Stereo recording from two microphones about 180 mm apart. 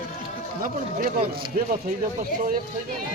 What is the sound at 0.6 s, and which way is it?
Speech, 50° right (ahead or behind).